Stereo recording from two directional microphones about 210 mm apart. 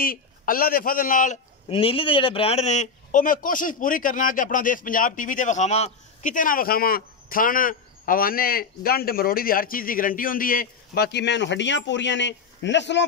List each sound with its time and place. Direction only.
0.0 s speech: 45° left (ahead or behind)
1.7 s a man's voice: 25° left (ahead or behind); by 13.0 s 55° left (ahead or behind)